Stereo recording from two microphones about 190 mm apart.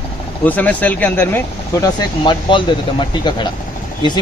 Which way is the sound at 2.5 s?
25° left (ahead or behind).